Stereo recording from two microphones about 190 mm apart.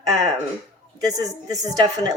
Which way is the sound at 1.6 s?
20° right (ahead or behind).